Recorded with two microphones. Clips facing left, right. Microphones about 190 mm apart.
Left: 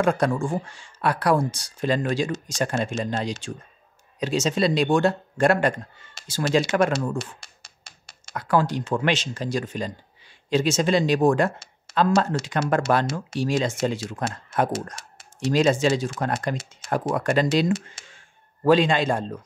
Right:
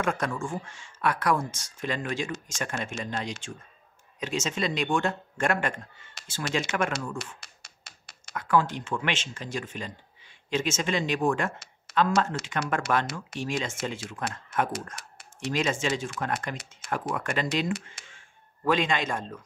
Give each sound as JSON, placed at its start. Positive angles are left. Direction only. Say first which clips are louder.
{"t": 0.0, "sound": "speech", "louder": "left 7 dB", "side_deg": 35}
{"t": 13.3, "sound": "speech", "louder": "left 10 dB", "side_deg": 35}
{"t": 17.1, "sound": "speech", "louder": "left 9 dB", "side_deg": 40}